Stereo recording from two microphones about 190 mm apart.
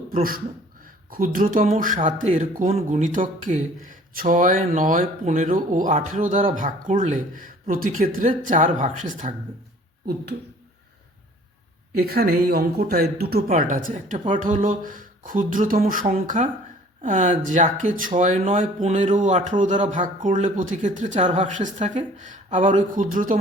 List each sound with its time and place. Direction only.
0.1 s speech: 50° right (ahead or behind)
11.9 s speech: 55° right (ahead or behind)